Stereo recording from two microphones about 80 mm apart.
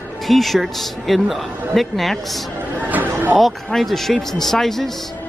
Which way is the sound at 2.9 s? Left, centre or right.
Right.